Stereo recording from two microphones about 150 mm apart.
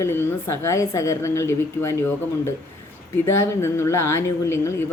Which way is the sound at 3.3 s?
15° left (ahead or behind).